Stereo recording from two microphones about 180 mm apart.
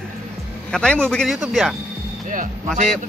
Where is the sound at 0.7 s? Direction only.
5° left (ahead or behind).